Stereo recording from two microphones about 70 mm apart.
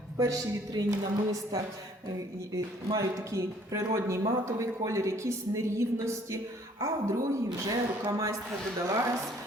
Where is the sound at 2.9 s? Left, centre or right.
Right.